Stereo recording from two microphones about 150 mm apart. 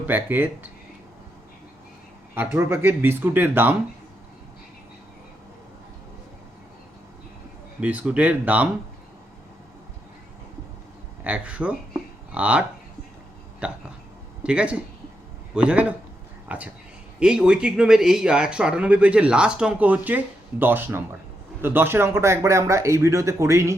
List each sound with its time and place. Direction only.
0.0 s speech: 15° right (ahead or behind)
2.3 s speech: 15° right (ahead or behind)
7.8 s speech: 10° right (ahead or behind)
11.2 s speech: 10° right (ahead or behind)